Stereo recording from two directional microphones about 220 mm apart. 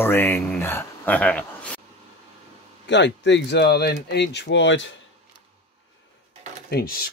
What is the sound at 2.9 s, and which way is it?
Speech, 55° left (ahead or behind).